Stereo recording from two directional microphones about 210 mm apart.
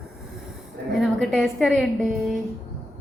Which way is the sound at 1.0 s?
Centre (ahead or behind).